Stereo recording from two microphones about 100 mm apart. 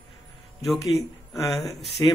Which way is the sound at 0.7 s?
Centre (ahead or behind).